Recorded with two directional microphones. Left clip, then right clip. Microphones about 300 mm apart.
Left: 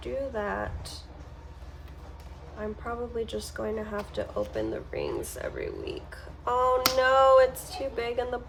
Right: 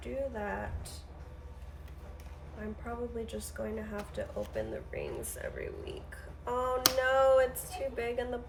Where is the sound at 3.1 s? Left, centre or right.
Centre.